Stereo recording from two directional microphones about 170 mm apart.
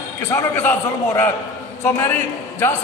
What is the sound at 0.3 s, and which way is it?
A man's voice, 15° left (ahead or behind).